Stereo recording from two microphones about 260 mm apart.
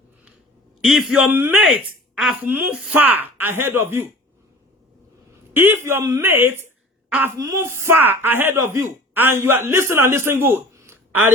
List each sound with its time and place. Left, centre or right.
0.8 s a man's voice: centre
5.5 s speech: centre